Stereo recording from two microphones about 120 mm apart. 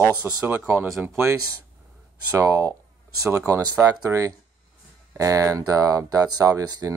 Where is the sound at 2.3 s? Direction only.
25° right (ahead or behind).